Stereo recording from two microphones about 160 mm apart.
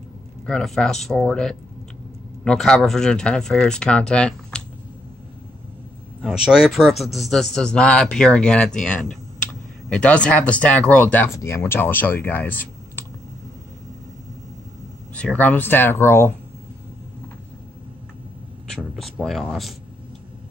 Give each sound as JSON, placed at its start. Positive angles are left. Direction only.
{"t": 0.5, "sound": "a man's voice", "side_deg": 5}
{"t": 6.2, "sound": "a man's voice", "side_deg": -5}
{"t": 15.1, "sound": "speech", "side_deg": 10}
{"t": 18.9, "sound": "speech", "side_deg": 0}